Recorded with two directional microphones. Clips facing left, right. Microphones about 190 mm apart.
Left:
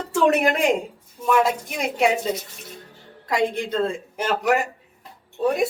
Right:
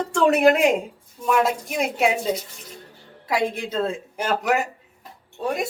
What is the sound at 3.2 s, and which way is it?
Speech, 5° right (ahead or behind).